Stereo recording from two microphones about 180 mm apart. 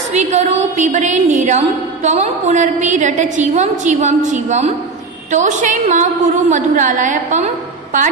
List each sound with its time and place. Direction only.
0.1 s a woman's voice: 40° right (ahead or behind)